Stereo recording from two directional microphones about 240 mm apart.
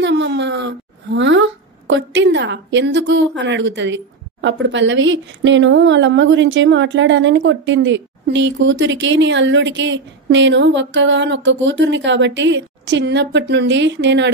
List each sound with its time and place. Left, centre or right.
0.0 s speech: right